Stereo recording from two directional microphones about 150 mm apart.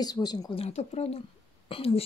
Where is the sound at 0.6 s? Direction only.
45° left (ahead or behind).